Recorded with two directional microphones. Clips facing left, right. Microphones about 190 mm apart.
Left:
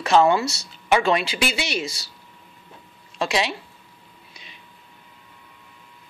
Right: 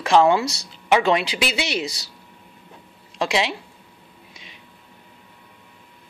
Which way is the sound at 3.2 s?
20° right (ahead or behind).